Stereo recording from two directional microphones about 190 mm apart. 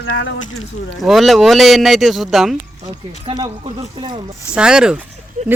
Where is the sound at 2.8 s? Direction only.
20° right (ahead or behind).